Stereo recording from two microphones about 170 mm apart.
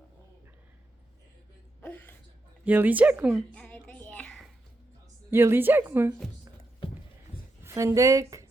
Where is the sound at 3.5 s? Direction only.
5° left (ahead or behind).